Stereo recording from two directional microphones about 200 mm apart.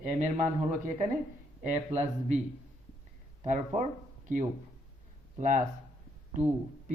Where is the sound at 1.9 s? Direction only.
35° right (ahead or behind).